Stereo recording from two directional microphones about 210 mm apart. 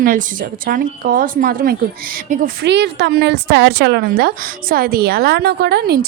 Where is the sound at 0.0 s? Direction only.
40° right (ahead or behind).